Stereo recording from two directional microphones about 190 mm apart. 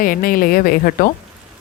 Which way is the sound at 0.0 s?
50° left (ahead or behind).